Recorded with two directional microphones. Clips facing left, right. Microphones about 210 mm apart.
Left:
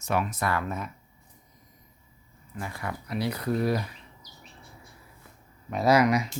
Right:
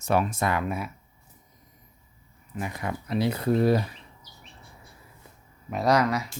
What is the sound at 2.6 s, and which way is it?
Speech, 20° right (ahead or behind).